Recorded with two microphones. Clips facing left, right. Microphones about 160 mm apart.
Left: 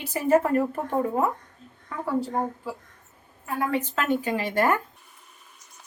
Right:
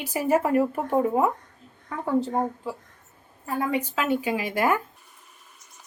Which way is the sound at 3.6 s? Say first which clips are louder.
Even; 10° right (ahead or behind).